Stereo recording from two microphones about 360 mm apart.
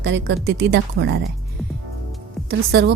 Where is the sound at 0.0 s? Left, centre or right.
Right.